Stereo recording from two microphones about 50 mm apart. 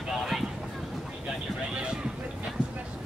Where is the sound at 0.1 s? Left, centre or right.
Centre.